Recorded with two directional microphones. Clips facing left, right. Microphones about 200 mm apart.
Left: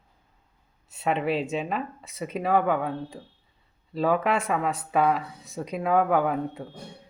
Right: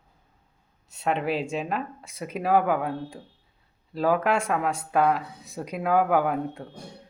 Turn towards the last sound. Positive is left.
turn(degrees=0)  # may be behind; listen again after turning